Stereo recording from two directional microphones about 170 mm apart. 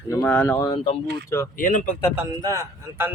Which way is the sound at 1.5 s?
50° left (ahead or behind).